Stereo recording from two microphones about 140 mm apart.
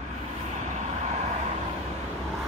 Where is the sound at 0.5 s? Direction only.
55° right (ahead or behind).